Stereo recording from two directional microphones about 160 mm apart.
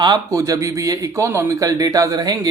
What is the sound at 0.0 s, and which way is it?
Speech, 25° right (ahead or behind).